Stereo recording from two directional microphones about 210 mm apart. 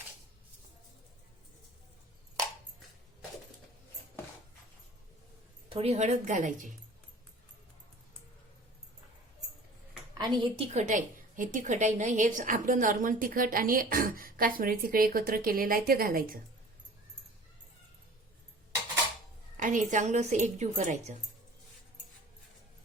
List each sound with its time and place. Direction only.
5.6 s a woman's voice: 25° right (ahead or behind)
10.2 s a woman's voice: 20° right (ahead or behind)
10.8 s a woman's voice: 35° right (ahead or behind)
19.6 s a woman's voice: 35° right (ahead or behind)